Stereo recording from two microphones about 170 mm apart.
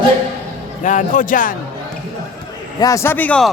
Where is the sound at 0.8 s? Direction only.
50° left (ahead or behind).